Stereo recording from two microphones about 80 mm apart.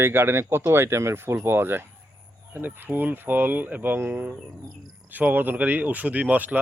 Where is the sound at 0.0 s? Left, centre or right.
Right.